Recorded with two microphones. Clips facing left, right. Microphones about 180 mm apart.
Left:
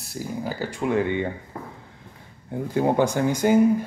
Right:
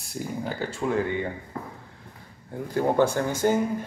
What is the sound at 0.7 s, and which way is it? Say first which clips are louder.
Speech: left 4 dB; 20° left (ahead or behind).